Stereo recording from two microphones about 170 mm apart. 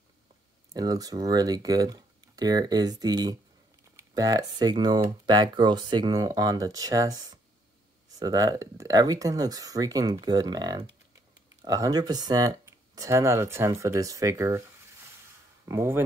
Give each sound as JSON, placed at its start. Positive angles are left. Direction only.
{"t": 0.7, "sound": "speech", "side_deg": -20}
{"t": 15.7, "sound": "speech", "side_deg": -15}